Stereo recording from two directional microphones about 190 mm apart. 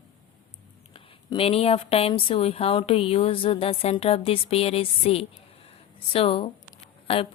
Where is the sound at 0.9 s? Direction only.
30° left (ahead or behind).